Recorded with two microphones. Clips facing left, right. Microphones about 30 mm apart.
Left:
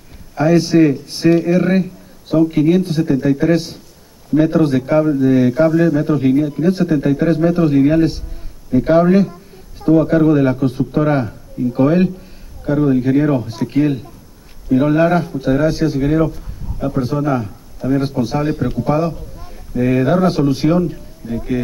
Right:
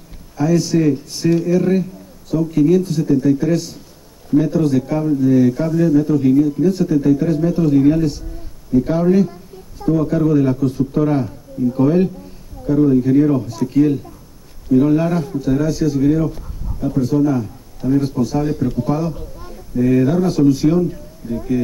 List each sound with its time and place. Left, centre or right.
0.4 s speech: left